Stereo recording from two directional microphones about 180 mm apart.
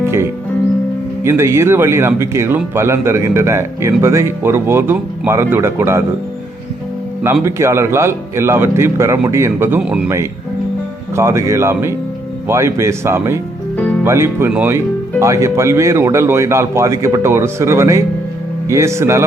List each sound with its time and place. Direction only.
0.0 s music: 15° right (ahead or behind)
1.2 s speech: 15° right (ahead or behind)
7.4 s speech: 15° right (ahead or behind)
11.1 s speech: 15° right (ahead or behind)